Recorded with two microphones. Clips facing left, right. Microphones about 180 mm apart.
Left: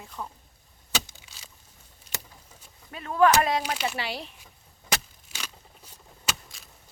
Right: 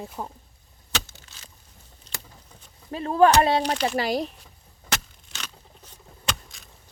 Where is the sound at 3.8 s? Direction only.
40° right (ahead or behind).